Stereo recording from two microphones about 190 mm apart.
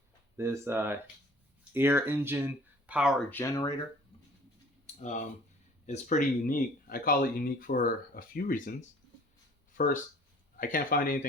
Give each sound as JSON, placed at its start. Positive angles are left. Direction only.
{"t": 0.3, "sound": "speech", "side_deg": -15}
{"t": 3.2, "sound": "speech", "side_deg": 15}
{"t": 4.9, "sound": "speech", "side_deg": 40}
{"t": 9.7, "sound": "speech", "side_deg": 45}